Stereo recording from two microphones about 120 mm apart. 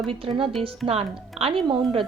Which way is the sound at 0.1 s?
50° right (ahead or behind).